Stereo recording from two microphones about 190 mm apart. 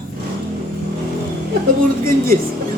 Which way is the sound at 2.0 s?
50° right (ahead or behind).